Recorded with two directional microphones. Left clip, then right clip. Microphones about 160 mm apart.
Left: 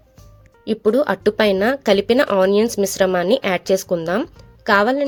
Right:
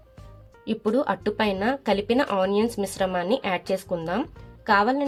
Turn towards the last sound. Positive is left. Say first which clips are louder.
# left 5 dB
turn(degrees=35)  # may be behind; listen again after turning